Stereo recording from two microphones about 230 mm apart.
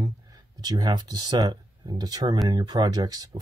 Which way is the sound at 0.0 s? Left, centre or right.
Centre.